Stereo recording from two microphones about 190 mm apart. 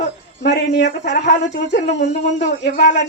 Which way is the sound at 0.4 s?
65° left (ahead or behind).